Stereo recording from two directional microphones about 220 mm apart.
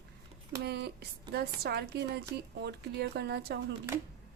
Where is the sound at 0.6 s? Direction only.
50° right (ahead or behind).